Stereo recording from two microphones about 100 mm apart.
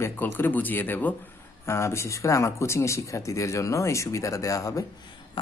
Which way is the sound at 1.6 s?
30° left (ahead or behind).